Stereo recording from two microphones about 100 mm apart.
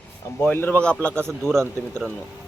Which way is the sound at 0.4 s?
20° left (ahead or behind).